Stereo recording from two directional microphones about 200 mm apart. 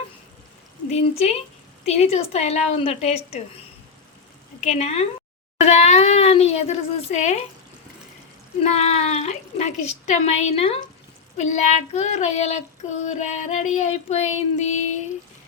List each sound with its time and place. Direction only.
0.9 s a woman's voice: 30° left (ahead or behind)
4.6 s a woman's voice: 30° left (ahead or behind)
8.6 s a woman's voice: 30° left (ahead or behind)